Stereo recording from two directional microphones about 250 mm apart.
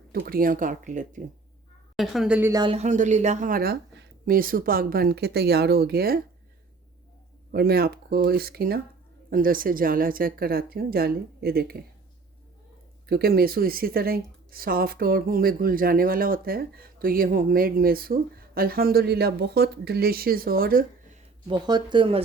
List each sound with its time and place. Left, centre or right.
0.1 s a woman's voice: right
2.0 s a woman's voice: centre; by 6.1 s right
7.5 s a woman's voice: right
13.1 s a woman's voice: right
21.4 s speech: centre